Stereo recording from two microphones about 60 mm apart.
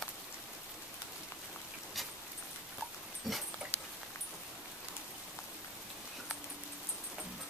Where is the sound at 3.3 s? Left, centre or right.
Centre.